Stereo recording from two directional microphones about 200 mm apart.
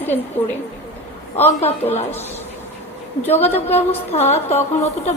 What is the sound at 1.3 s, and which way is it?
Speech, 30° left (ahead or behind).